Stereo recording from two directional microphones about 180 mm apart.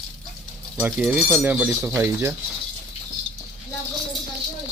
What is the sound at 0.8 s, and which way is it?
Speech, 5° right (ahead or behind).